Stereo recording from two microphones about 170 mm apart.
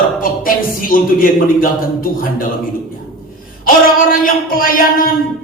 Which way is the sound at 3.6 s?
55° left (ahead or behind).